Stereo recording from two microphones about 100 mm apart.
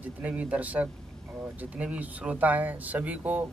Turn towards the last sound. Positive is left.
turn(degrees=-15)  # may be behind; listen again after turning